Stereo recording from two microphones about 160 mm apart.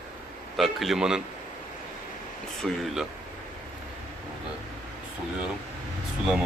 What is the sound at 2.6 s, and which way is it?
Speech, centre (ahead or behind).